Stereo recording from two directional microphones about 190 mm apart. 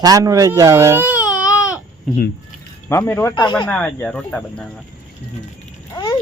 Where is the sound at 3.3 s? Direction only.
25° left (ahead or behind).